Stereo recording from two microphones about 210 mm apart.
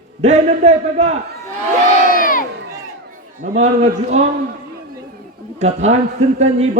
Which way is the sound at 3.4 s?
35° right (ahead or behind).